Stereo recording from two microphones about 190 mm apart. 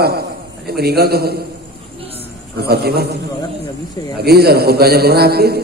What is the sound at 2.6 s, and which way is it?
Speech, 55° right (ahead or behind).